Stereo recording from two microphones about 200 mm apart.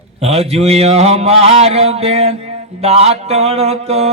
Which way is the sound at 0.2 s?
30° right (ahead or behind).